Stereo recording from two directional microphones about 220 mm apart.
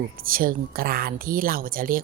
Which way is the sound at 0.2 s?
40° right (ahead or behind).